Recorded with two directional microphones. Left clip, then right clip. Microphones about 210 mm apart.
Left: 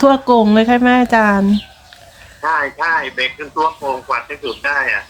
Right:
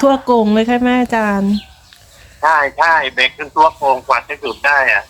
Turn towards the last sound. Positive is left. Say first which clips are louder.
# right 5 dB
turn(degrees=-55)  # may be behind; listen again after turning